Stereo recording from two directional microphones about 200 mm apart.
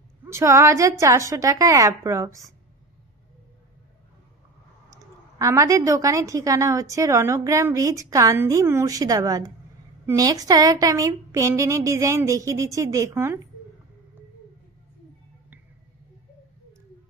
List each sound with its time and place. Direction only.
0.2 s a woman's voice: 15° right (ahead or behind)
4.9 s a woman's voice: 15° right (ahead or behind)